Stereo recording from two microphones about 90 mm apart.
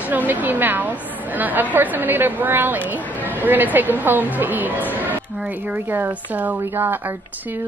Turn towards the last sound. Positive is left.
turn(degrees=-25)  # may be behind; listen again after turning